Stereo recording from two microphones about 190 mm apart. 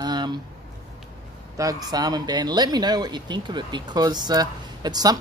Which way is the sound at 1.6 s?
20° right (ahead or behind).